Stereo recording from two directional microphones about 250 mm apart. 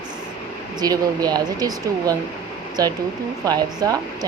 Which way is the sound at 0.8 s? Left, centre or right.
Centre.